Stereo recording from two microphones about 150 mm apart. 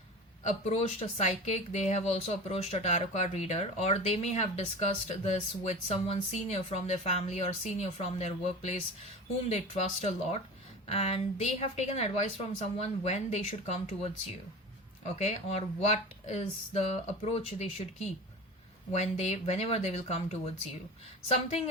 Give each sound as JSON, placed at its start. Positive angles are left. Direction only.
{"t": 0.4, "sound": "speech", "side_deg": 45}